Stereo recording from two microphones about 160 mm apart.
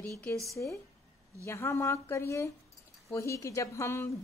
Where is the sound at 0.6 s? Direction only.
10° left (ahead or behind).